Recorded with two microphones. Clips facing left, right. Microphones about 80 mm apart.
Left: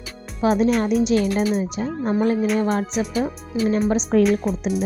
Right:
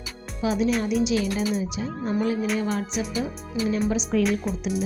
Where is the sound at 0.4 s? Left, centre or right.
Left.